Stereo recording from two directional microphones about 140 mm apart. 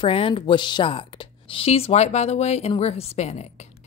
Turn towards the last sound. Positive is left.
turn(degrees=50)  # may be behind; listen again after turning